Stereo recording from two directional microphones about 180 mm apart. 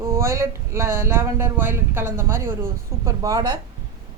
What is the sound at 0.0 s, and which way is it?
A woman's voice, 15° right (ahead or behind).